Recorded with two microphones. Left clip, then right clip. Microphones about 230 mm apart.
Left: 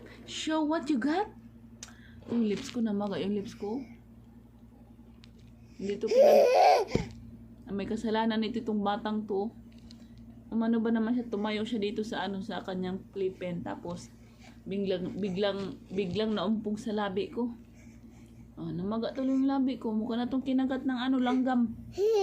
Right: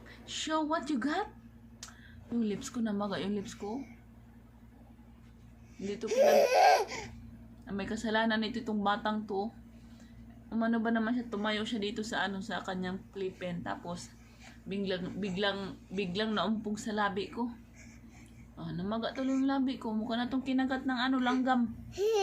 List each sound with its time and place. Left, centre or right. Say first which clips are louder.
0.3 s a woman's voice: left 2 dB; centre
2.4 s a woman's voice: left 3 dB; centre
6.1 s laughter: left 4 dB; centre
7.7 s a woman's voice: left 1 dB; centre
10.5 s a woman's voice: left 2 dB; centre
18.5 s a woman's voice: left 2 dB; centre
21.9 s laughter: left 3 dB; centre